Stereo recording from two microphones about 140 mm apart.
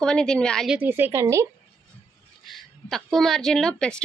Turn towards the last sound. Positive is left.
turn(degrees=5)  # may be behind; listen again after turning